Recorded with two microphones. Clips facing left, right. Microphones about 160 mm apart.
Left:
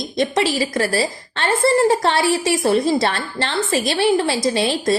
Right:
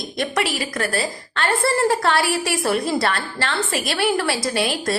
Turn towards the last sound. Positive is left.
turn(degrees=25)  # may be behind; listen again after turning